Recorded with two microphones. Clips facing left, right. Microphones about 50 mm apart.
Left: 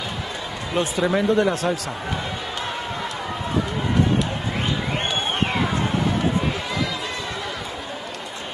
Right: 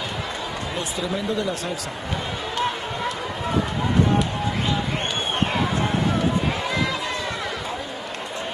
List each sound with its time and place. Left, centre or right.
0.7 s speech: left